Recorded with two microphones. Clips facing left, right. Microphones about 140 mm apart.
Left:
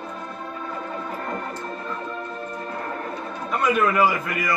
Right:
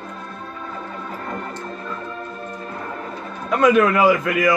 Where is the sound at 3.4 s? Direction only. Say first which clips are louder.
Right 6 dB; 90° right.